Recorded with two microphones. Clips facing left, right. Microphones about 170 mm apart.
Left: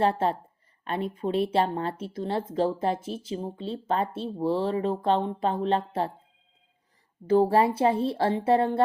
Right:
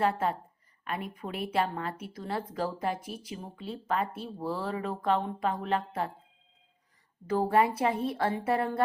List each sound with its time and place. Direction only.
0.0 s speech: 30° left (ahead or behind)
7.3 s speech: 30° left (ahead or behind)